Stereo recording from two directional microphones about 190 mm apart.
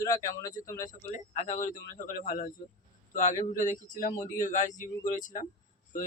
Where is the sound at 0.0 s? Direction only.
15° left (ahead or behind).